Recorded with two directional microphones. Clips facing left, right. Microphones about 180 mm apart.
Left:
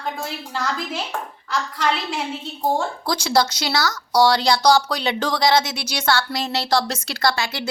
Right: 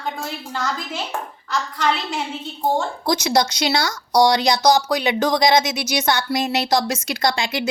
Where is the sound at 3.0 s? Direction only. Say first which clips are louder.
Right 2 dB; 20° right (ahead or behind).